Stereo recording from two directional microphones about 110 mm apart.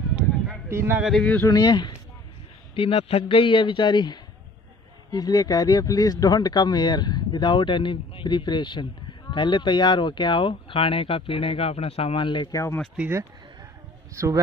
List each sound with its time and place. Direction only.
0.7 s speech: 20° right (ahead or behind)
1.2 s speech: 15° left (ahead or behind)
1.5 s speech: 40° left (ahead or behind)
2.7 s a man's voice: 55° left (ahead or behind)
14.1 s speech: 30° right (ahead or behind)